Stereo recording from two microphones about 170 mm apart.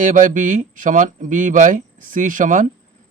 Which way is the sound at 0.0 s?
50° right (ahead or behind).